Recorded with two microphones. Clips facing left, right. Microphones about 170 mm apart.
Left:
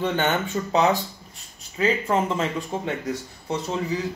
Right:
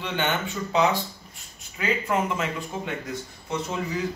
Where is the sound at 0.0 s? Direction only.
45° left (ahead or behind).